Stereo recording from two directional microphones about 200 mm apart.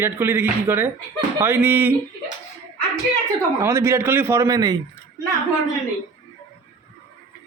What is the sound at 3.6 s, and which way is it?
A man's voice, 15° right (ahead or behind).